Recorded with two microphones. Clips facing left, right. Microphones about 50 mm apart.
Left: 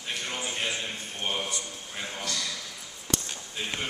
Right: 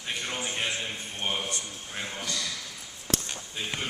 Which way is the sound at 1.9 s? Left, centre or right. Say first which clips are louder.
Even; centre.